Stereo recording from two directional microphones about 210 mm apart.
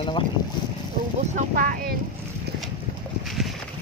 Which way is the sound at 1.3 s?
45° right (ahead or behind).